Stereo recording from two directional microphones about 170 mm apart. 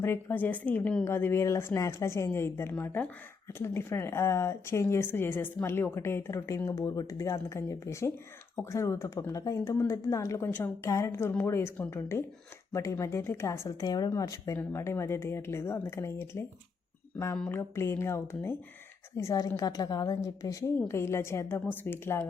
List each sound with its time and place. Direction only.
0.0 s speech: 15° left (ahead or behind)